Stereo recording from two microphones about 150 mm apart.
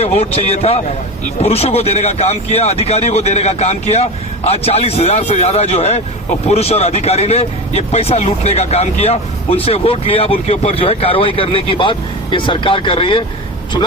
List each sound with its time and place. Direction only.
0.0 s speech: 45° left (ahead or behind)